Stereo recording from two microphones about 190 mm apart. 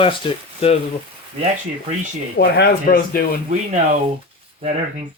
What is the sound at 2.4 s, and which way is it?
Speech, 60° left (ahead or behind).